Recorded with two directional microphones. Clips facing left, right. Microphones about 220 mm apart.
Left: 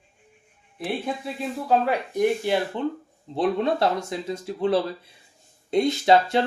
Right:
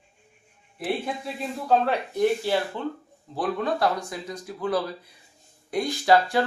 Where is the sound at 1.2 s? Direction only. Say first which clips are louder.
Left 2 dB; 5° left (ahead or behind).